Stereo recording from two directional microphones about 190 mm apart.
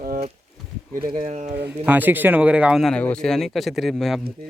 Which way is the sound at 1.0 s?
25° right (ahead or behind).